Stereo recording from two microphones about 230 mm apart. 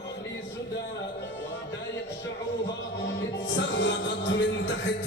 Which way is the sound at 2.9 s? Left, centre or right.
Left.